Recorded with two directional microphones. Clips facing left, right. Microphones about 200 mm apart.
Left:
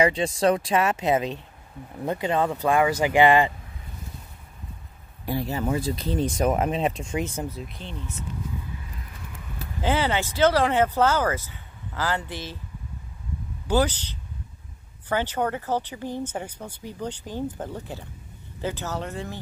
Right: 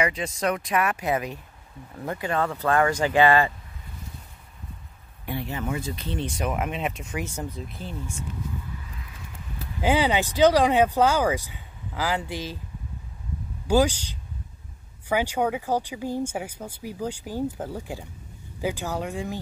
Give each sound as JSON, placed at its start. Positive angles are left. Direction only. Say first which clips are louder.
{"t": 0.0, "sound": "speech", "louder": "left 5 dB", "side_deg": 30}
{"t": 5.2, "sound": "speech", "louder": "left 4 dB", "side_deg": 35}
{"t": 7.4, "sound": "speech", "louder": "even", "side_deg": 5}
{"t": 9.8, "sound": "speech", "louder": "right 2 dB", "side_deg": -15}
{"t": 13.7, "sound": "speech", "louder": "right 2 dB", "side_deg": -10}